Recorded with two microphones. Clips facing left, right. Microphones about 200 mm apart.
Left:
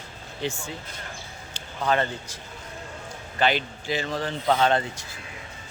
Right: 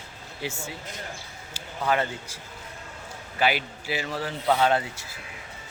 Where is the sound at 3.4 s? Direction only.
10° right (ahead or behind).